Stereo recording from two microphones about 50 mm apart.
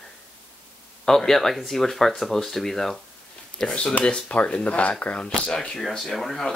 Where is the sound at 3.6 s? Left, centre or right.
Left.